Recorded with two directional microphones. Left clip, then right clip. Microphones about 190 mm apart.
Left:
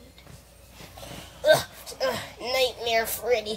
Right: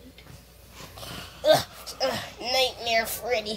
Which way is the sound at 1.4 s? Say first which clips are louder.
Even; 25° left (ahead or behind).